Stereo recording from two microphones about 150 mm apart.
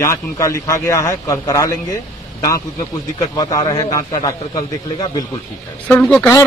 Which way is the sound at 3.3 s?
25° left (ahead or behind).